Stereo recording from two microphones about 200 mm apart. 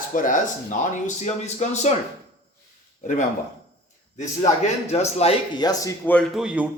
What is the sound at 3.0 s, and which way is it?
Speech, 40° left (ahead or behind).